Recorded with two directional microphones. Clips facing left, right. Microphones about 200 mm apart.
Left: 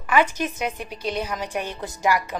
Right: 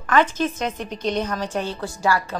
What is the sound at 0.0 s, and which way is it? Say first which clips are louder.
A woman's voice: right 2 dB; 10° left (ahead or behind).